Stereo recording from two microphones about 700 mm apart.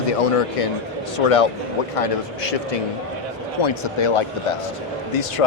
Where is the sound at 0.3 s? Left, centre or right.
Left.